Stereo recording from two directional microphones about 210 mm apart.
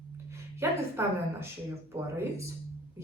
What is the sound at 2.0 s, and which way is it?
Speech, 10° right (ahead or behind).